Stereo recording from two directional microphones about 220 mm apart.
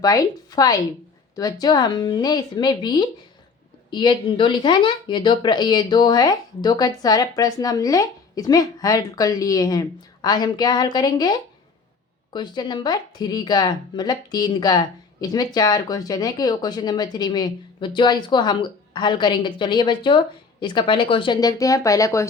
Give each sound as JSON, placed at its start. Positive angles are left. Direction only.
{"t": 0.0, "sound": "speech", "side_deg": 15}